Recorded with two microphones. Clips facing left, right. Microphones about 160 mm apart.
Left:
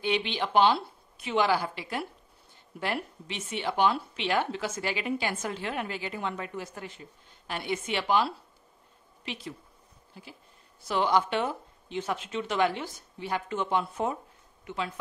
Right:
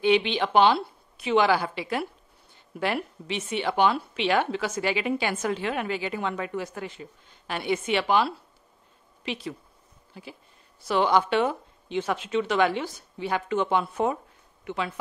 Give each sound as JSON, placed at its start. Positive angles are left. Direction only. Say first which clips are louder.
{"t": 0.0, "sound": "speech", "louder": "right 7 dB", "side_deg": -80}
{"t": 10.9, "sound": "speech", "louder": "right 4 dB", "side_deg": -75}